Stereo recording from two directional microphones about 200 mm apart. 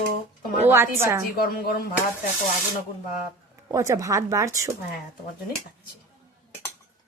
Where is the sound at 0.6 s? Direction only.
10° right (ahead or behind).